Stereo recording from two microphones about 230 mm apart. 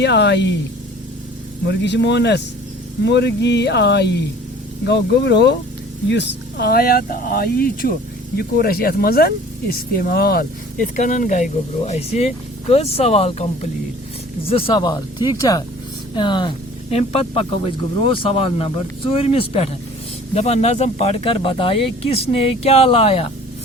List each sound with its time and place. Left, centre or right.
0.0 s speech: left
1.6 s speech: left